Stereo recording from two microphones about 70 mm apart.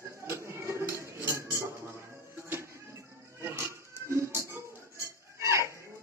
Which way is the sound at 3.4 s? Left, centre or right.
Right.